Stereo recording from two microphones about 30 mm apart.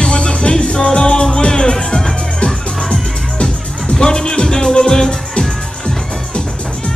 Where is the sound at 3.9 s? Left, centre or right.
Left.